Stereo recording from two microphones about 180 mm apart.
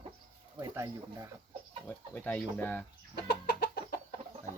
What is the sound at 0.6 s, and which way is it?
Speech, 15° right (ahead or behind).